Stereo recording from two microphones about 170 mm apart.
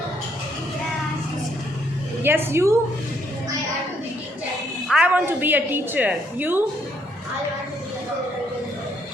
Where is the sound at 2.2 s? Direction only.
15° right (ahead or behind).